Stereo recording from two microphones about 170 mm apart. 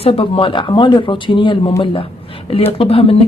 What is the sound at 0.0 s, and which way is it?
Speech, 35° left (ahead or behind).